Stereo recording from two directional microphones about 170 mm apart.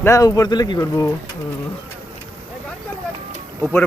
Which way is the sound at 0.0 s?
20° left (ahead or behind).